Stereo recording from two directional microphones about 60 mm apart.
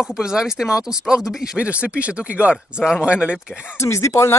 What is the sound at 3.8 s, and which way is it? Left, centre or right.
Speech, left.